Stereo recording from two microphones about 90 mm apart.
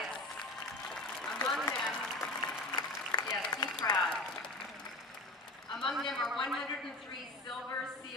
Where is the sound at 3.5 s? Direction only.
60° left (ahead or behind).